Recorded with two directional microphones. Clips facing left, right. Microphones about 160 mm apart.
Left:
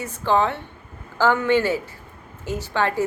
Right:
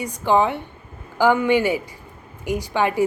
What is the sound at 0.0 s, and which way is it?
A woman's voice, 15° right (ahead or behind).